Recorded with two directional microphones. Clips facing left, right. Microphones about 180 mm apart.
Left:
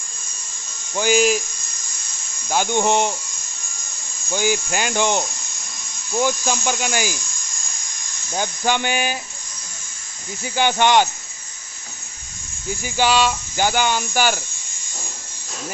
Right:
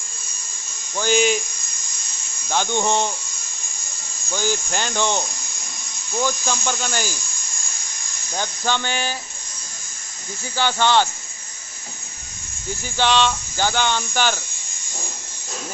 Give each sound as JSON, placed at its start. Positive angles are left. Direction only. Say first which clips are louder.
{"t": 0.9, "sound": "speech", "louder": "left 2 dB", "side_deg": 5}
{"t": 2.5, "sound": "speech", "louder": "left 2 dB", "side_deg": 10}
{"t": 4.3, "sound": "speech", "louder": "left 3 dB", "side_deg": 10}
{"t": 8.3, "sound": "speech", "louder": "left 3 dB", "side_deg": 15}
{"t": 10.4, "sound": "speech", "louder": "left 3 dB", "side_deg": 15}
{"t": 12.8, "sound": "speech", "louder": "left 1 dB", "side_deg": 10}